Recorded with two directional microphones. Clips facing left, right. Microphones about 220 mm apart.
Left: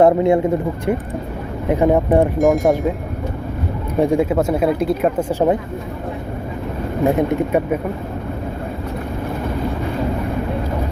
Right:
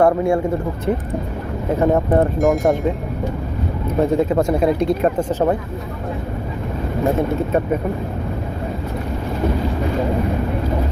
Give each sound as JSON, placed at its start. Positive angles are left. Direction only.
{"t": 0.0, "sound": "speech", "side_deg": 20}
{"t": 0.9, "sound": "speech", "side_deg": 5}
{"t": 2.4, "sound": "speech", "side_deg": 0}
{"t": 4.0, "sound": "speech", "side_deg": 10}
{"t": 7.2, "sound": "speech", "side_deg": 15}